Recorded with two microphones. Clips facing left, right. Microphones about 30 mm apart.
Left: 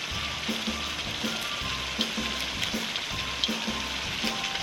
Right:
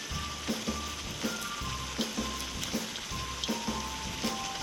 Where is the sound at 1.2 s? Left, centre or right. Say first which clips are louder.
Left 2 dB; left.